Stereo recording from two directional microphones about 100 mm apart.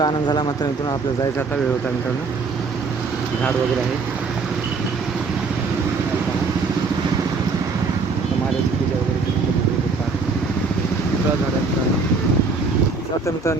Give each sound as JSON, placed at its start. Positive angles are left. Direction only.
{"t": 0.0, "sound": "speech", "side_deg": 45}
{"t": 13.2, "sound": "speech", "side_deg": 30}